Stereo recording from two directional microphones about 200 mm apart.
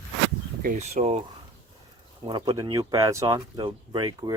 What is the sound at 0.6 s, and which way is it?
Speech, 40° right (ahead or behind).